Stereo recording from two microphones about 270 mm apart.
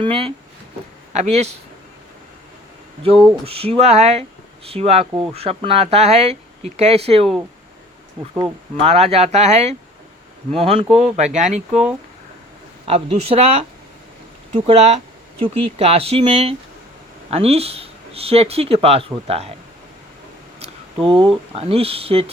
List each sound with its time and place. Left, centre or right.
0.0 s speech: centre
3.4 s speech: right
8.4 s speech: centre
12.8 s speech: right
21.1 s speech: right